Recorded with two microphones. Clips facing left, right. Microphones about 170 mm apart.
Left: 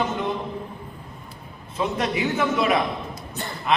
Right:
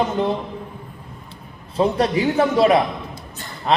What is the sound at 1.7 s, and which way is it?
A man's voice, 35° right (ahead or behind).